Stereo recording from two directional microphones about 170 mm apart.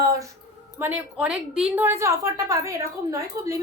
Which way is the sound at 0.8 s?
10° right (ahead or behind).